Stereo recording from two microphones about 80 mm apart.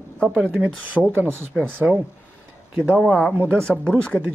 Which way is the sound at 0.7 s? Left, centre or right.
Centre.